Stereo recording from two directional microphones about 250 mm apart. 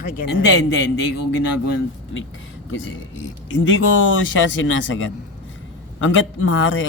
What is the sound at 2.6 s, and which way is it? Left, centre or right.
Speech, left.